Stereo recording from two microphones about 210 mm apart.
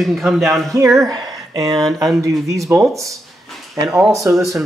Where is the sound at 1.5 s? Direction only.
15° right (ahead or behind).